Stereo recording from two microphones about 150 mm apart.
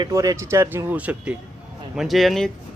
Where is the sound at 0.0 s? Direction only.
25° right (ahead or behind).